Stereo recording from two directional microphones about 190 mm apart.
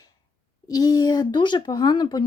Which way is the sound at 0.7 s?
20° left (ahead or behind).